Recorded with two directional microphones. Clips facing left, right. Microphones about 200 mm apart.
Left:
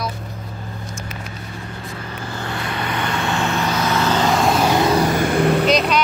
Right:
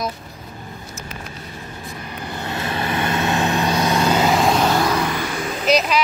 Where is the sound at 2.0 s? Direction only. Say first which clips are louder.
Even; 15° right (ahead or behind); by 4.6 s centre (ahead or behind).